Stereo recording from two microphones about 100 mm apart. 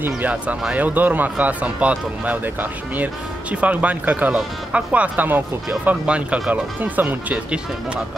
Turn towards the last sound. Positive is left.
turn(degrees=-10)  # may be behind; listen again after turning